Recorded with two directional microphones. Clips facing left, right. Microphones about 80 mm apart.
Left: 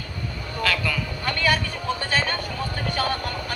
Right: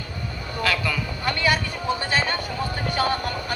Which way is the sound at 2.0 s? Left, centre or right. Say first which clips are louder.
Right 1 dB; centre.